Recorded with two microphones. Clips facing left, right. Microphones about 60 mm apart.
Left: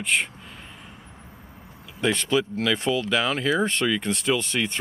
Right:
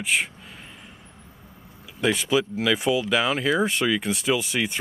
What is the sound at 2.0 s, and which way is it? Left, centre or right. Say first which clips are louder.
Speech: right 1 dB; centre.